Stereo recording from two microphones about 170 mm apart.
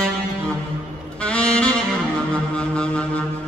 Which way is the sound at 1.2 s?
5° left (ahead or behind).